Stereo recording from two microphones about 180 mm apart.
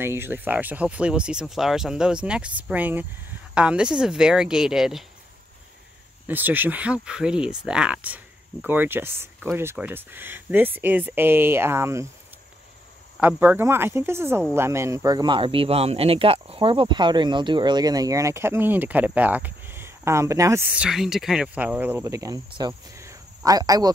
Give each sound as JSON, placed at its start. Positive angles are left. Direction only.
{"t": 0.0, "sound": "speech", "side_deg": -10}
{"t": 6.2, "sound": "speech", "side_deg": -10}
{"t": 13.2, "sound": "speech", "side_deg": -10}